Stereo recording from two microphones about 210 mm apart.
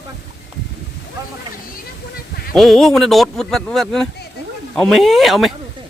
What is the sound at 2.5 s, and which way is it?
Speech, centre (ahead or behind).